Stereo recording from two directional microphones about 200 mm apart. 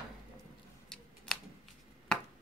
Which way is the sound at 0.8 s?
5° left (ahead or behind).